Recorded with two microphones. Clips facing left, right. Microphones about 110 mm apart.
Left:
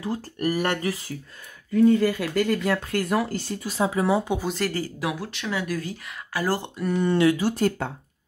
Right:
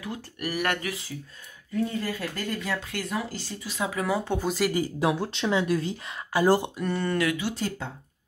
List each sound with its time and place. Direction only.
0.0 s speech: 35° left (ahead or behind)
1.9 s speech: 85° left; by 3.7 s 50° left (ahead or behind)
3.7 s speech: 30° left (ahead or behind)
4.4 s speech: 5° right (ahead or behind)
4.7 s speech: 25° right (ahead or behind)
6.8 s speech: 5° left (ahead or behind)
7.1 s speech: 25° left (ahead or behind)
7.3 s speech: 45° left (ahead or behind)